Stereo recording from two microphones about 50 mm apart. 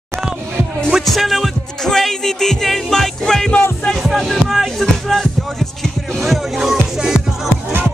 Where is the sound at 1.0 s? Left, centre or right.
Centre.